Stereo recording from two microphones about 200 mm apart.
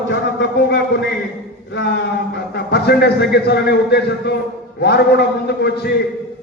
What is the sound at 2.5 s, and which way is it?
A man's voice, 55° left (ahead or behind).